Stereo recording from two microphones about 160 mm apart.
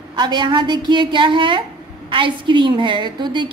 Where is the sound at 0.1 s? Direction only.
30° right (ahead or behind).